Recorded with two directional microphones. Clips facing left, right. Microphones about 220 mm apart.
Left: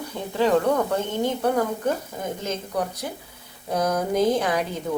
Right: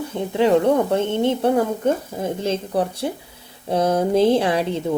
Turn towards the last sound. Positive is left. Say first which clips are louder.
# right 5 dB
turn(degrees=-30)  # may be behind; listen again after turning